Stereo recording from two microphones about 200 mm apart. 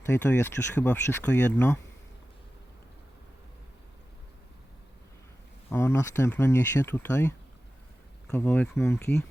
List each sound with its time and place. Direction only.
0.0 s speech: 10° left (ahead or behind)
5.7 s speech: 10° left (ahead or behind)